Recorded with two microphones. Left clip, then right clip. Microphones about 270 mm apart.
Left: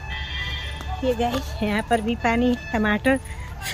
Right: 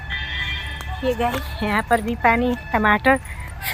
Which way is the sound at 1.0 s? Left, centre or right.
Centre.